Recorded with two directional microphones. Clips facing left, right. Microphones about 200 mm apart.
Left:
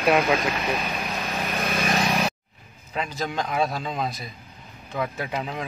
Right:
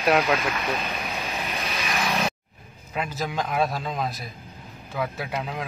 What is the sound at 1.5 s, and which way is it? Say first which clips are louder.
Vehicle: left 5 dB; 50° left (ahead or behind).